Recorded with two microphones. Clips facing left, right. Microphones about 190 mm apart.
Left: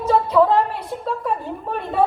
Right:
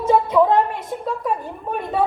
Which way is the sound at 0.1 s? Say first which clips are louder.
Even; 15° right (ahead or behind).